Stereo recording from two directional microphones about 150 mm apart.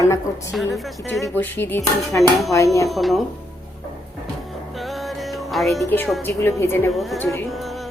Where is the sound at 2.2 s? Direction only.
Centre (ahead or behind).